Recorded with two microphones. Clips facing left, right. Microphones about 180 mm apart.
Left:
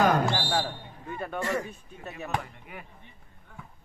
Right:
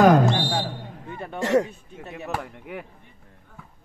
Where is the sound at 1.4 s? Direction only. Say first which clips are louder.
Right 11 dB; 75° right (ahead or behind).